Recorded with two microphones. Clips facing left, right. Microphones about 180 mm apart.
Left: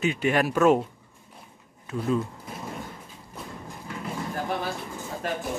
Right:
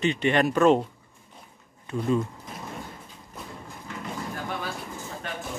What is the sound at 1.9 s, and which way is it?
Speech, centre (ahead or behind).